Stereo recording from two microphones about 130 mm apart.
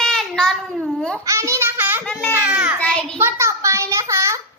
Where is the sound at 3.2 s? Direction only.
25° right (ahead or behind).